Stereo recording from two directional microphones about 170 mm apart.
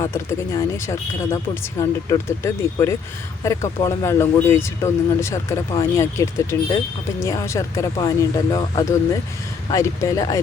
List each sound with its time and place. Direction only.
0.0 s speech: 15° left (ahead or behind)